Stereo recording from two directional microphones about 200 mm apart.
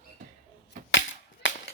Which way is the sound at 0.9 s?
65° left (ahead or behind).